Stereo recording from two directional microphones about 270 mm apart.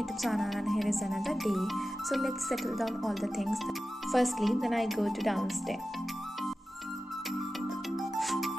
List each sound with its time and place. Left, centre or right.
0.2 s speech: centre
7.9 s music: centre